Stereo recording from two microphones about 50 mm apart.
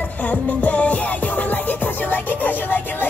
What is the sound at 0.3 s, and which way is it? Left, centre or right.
Music, left.